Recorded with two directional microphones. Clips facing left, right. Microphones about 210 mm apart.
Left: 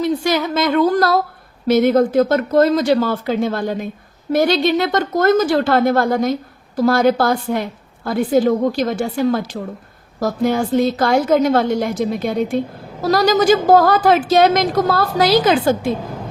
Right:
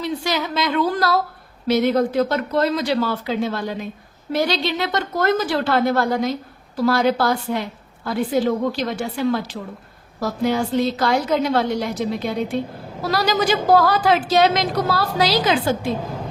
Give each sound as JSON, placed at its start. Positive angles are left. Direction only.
{"t": 0.0, "sound": "a woman's voice", "side_deg": 50}